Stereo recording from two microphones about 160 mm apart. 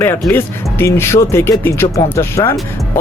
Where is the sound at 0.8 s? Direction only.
15° left (ahead or behind).